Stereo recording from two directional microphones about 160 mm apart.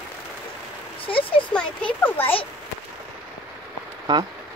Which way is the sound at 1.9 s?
10° left (ahead or behind).